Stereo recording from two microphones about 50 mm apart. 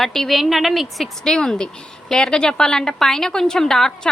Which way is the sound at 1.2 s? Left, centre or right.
Centre.